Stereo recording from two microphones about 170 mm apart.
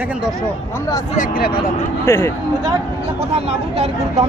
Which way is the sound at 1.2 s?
60° left (ahead or behind).